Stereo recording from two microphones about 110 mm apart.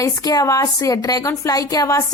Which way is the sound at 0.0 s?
35° left (ahead or behind).